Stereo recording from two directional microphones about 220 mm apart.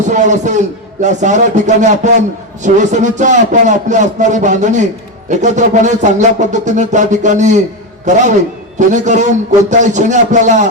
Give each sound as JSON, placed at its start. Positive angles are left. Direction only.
{"t": 0.1, "sound": "music", "side_deg": -35}